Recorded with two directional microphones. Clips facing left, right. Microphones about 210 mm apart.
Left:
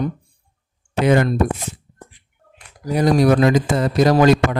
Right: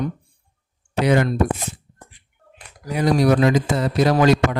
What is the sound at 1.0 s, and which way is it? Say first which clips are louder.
Speech: left 2 dB; 50° left (ahead or behind).